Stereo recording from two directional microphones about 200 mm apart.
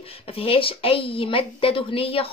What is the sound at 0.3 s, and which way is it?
A woman's voice, 30° left (ahead or behind).